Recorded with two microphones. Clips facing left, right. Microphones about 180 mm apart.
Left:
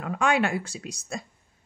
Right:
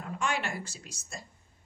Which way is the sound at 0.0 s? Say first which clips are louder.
Left 9 dB; 85° left.